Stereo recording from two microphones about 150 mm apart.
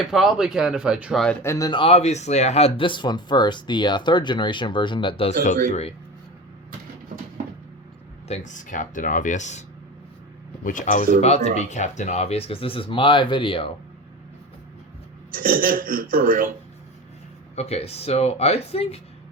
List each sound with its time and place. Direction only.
0.1 s speech: centre (ahead or behind)
1.2 s speech: 10° left (ahead or behind)
1.8 s speech: 45° left (ahead or behind)
5.6 s speech: 45° left (ahead or behind)
8.3 s speech: 55° left (ahead or behind)
11.2 s speech: 45° left (ahead or behind)
15.4 s speech: 70° right (ahead or behind)
17.5 s speech: 45° left (ahead or behind)